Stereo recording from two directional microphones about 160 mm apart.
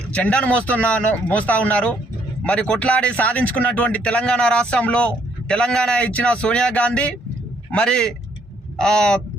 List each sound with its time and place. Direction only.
0.1 s a man's voice: 10° left (ahead or behind)